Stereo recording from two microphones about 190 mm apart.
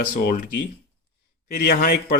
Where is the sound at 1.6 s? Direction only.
50° left (ahead or behind).